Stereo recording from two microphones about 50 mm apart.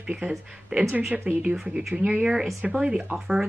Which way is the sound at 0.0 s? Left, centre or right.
Right.